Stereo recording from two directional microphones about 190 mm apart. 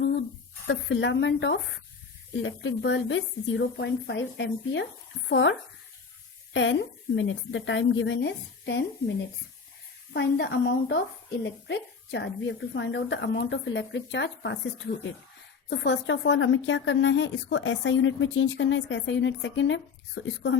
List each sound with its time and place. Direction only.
0.7 s a woman's voice: 70° left (ahead or behind)
2.4 s a woman's voice: 80° left
10.1 s a woman's voice: 65° left (ahead or behind)
15.7 s a woman's voice: 65° left (ahead or behind)